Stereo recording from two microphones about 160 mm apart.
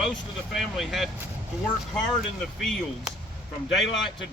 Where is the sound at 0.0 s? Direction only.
Centre (ahead or behind).